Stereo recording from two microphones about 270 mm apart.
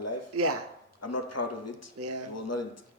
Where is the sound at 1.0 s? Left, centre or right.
Left.